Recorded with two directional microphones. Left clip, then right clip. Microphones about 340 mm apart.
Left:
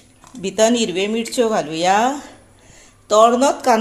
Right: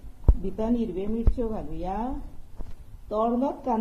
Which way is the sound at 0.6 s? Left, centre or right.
Left.